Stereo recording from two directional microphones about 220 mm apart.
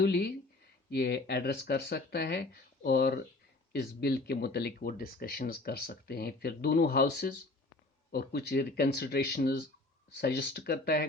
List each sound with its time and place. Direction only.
0.0 s speech: 45° left (ahead or behind)